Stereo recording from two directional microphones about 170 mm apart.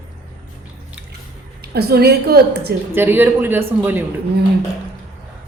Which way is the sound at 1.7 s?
70° right (ahead or behind).